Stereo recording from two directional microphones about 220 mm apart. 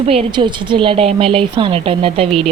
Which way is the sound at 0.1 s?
25° right (ahead or behind).